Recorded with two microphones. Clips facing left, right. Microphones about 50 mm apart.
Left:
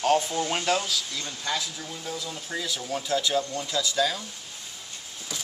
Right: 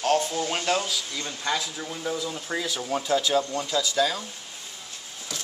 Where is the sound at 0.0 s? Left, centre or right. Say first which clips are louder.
Even; centre.